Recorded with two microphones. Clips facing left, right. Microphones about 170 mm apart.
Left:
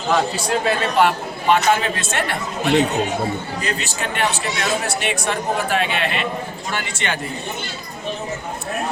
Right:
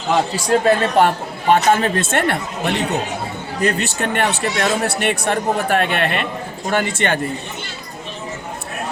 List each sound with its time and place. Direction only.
0.6 s speech: 45° right (ahead or behind)